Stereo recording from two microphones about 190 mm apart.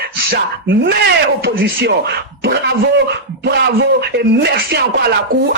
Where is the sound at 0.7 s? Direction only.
65° right (ahead or behind).